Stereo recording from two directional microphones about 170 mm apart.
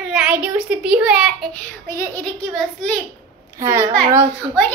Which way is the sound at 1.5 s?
15° left (ahead or behind).